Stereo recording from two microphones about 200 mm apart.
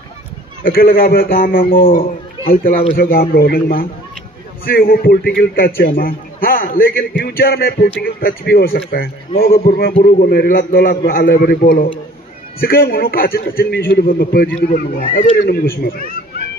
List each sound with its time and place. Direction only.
0.7 s a man's voice: 45° left (ahead or behind)